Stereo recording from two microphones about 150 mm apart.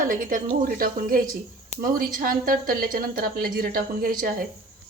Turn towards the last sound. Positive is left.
turn(degrees=-70)  # may be behind; listen again after turning